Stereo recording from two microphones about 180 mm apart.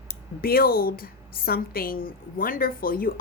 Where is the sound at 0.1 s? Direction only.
55° left (ahead or behind).